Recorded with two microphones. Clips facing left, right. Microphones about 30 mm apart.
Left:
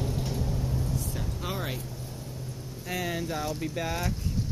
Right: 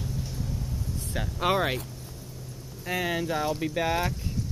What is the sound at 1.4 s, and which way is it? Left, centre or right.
Speech, right.